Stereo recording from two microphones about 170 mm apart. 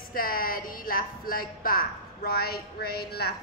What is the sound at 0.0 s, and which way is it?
Speech, 55° left (ahead or behind).